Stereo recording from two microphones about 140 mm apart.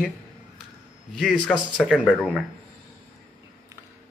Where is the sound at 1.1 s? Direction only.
Centre (ahead or behind).